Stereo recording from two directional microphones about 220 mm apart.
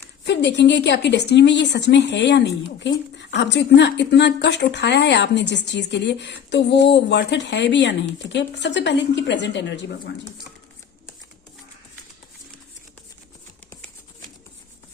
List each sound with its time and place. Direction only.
0.3 s speech: 50° left (ahead or behind)